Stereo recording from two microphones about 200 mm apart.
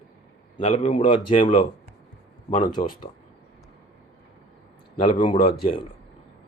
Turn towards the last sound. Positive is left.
turn(degrees=30)  # may be behind; listen again after turning